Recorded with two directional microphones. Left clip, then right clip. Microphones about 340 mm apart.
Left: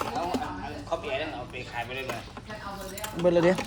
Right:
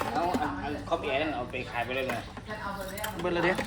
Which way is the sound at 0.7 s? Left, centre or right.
Centre.